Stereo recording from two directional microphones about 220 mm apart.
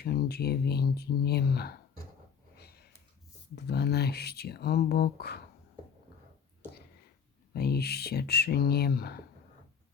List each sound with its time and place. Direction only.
0.0 s speech: 45° left (ahead or behind)
2.6 s a sound: 45° left (ahead or behind)
3.5 s speech: 45° left (ahead or behind)
7.5 s speech: 45° left (ahead or behind)